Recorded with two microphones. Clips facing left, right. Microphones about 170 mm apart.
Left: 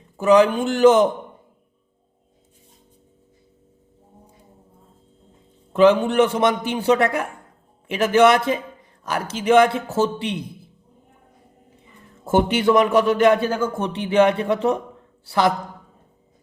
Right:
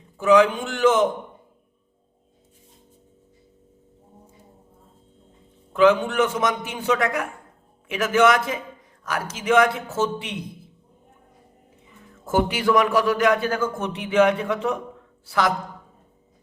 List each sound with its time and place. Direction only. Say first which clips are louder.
0.2 s a man's voice: left 2 dB; 35° left (ahead or behind)
5.7 s a man's voice: left 3 dB; 30° left (ahead or behind)
12.2 s a man's voice: left 4 dB; 25° left (ahead or behind)